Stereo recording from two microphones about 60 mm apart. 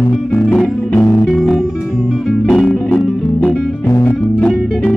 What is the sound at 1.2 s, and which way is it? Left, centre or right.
Music, centre.